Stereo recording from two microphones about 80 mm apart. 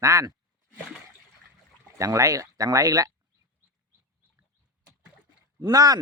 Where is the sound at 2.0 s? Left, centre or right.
Right.